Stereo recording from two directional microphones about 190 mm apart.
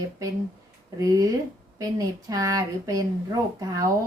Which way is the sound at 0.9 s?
15° right (ahead or behind).